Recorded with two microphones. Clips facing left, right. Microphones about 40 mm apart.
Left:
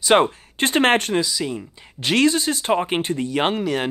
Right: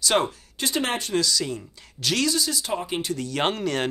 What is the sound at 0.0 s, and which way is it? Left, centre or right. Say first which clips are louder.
Speech: left 7 dB; left.